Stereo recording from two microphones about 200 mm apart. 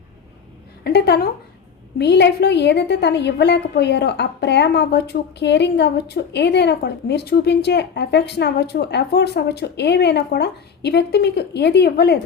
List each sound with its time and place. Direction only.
0.9 s a woman's voice: 55° left (ahead or behind)